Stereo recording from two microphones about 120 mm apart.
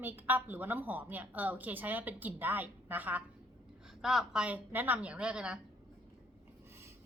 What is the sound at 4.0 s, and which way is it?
A woman's voice, 5° right (ahead or behind).